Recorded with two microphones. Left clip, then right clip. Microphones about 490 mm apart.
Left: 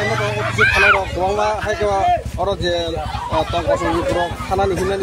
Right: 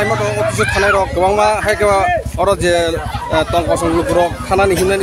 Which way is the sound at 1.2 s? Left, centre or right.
Left.